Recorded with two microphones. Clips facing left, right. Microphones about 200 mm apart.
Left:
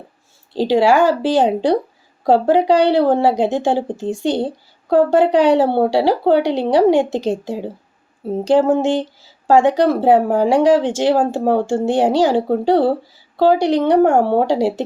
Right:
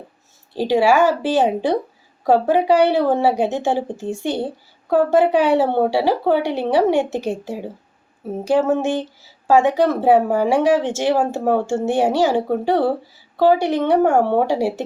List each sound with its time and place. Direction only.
0.5 s a woman's voice: 15° right (ahead or behind)
0.8 s a woman's voice: 15° left (ahead or behind)